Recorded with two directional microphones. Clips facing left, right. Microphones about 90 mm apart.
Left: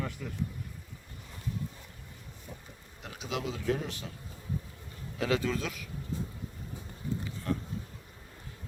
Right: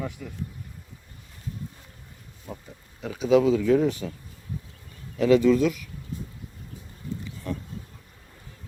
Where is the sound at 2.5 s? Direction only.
80° right.